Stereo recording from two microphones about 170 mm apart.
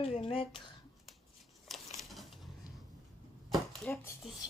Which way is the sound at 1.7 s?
Centre (ahead or behind).